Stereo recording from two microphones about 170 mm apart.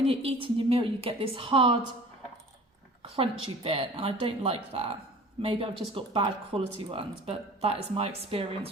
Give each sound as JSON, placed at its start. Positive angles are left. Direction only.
{"t": 0.0, "sound": "speech", "side_deg": -35}
{"t": 3.0, "sound": "speech", "side_deg": -35}